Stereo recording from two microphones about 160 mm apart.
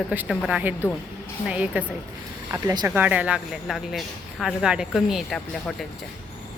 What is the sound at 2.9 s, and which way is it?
Speech, 10° right (ahead or behind).